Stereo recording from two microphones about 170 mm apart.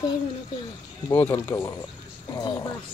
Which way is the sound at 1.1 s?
10° left (ahead or behind).